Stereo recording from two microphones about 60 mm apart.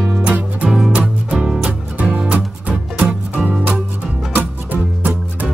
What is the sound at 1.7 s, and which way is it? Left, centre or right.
Music, right.